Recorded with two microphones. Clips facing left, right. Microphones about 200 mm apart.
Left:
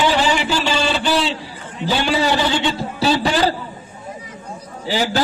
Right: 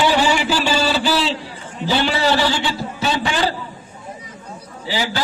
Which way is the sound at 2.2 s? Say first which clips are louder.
Even; 15° left (ahead or behind).